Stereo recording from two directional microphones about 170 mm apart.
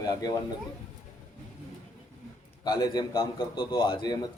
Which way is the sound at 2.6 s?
25° left (ahead or behind).